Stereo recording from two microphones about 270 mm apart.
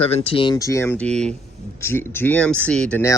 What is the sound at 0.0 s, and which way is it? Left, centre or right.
Speech, left.